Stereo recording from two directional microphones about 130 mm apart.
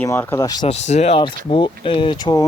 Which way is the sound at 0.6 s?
55° left (ahead or behind).